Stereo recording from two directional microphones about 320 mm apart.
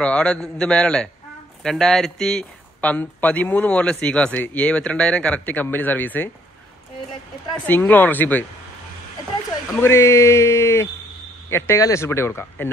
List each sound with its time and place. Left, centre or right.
0.0 s a man's voice: centre
7.5 s speech: centre
9.7 s speech: centre